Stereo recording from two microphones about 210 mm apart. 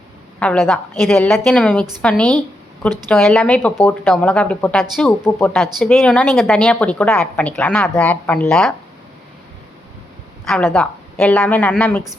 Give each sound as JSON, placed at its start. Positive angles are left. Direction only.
{"t": 0.3, "sound": "a woman's voice", "side_deg": 5}
{"t": 10.4, "sound": "a woman's voice", "side_deg": 5}